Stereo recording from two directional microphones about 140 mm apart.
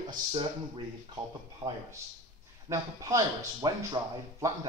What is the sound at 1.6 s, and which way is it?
Speech, 25° right (ahead or behind).